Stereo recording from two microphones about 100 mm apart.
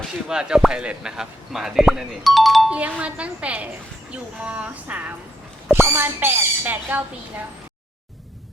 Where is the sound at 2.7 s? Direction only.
15° right (ahead or behind).